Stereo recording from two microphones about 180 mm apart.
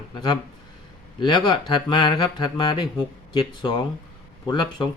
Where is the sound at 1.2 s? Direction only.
25° left (ahead or behind).